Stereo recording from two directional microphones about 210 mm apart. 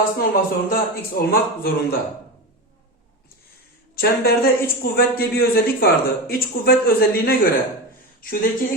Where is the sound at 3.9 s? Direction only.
45° left (ahead or behind).